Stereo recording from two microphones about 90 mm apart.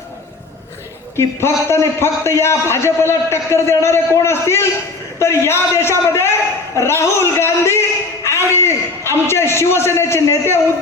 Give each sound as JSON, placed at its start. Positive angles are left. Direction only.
{"t": 1.1, "sound": "a man's voice", "side_deg": 30}